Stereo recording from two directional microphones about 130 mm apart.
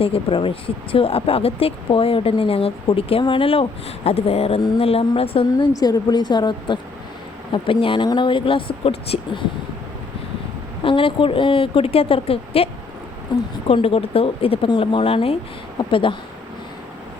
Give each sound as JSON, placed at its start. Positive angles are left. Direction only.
{"t": 0.0, "sound": "speech", "side_deg": 45}
{"t": 5.7, "sound": "speech", "side_deg": 30}
{"t": 10.8, "sound": "speech", "side_deg": 40}
{"t": 13.7, "sound": "speech", "side_deg": 50}